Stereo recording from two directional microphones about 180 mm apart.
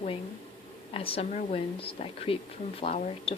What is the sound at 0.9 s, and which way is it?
Speech, 30° left (ahead or behind).